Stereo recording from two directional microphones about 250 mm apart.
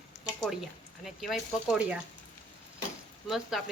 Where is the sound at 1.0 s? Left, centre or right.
Centre.